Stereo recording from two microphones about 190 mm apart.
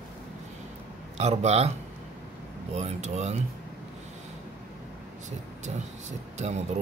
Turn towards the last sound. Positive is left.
turn(degrees=-35)  # may be behind; listen again after turning